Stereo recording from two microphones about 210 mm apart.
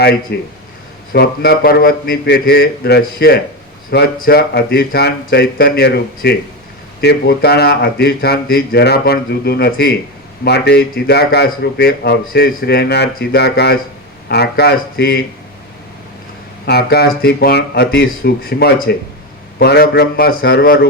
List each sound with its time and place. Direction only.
0.0 s speech: 50° left (ahead or behind)
16.6 s speech: 50° left (ahead or behind)